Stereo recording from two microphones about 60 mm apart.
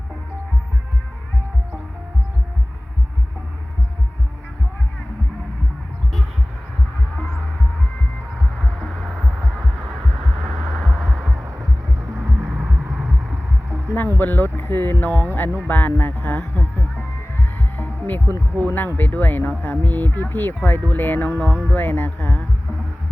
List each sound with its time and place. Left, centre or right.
8.5 s music: centre
9.0 s music: centre
9.8 s a sound: centre
11.1 s heart sounds: right
12.1 s music: right
12.5 s a sound: right
14.2 s speech: left
16.6 s heart sounds: left
18.3 s speech: right
18.6 s speech: left